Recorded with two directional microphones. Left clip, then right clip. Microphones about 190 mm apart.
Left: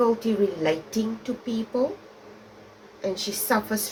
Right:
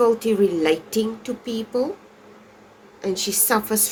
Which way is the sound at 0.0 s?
60° right (ahead or behind).